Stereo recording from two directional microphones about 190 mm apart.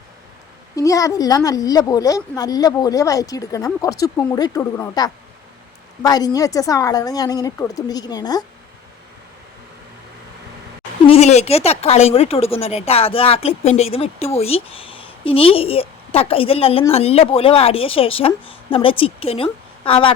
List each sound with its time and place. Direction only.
0.8 s a woman's voice: 15° left (ahead or behind)
11.0 s a woman's voice: 35° left (ahead or behind)